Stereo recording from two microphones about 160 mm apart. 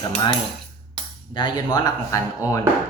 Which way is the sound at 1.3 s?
30° left (ahead or behind).